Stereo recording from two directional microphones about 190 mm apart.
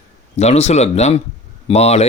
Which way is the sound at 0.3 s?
35° left (ahead or behind).